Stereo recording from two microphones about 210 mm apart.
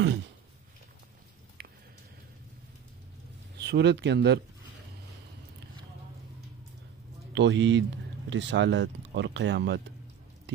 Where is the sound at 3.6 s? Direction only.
55° right (ahead or behind).